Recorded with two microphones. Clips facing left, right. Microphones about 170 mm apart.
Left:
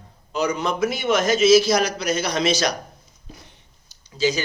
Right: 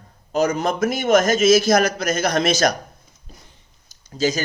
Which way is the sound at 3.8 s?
45° right (ahead or behind).